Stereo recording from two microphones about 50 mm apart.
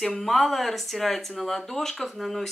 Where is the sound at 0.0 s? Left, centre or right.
Centre.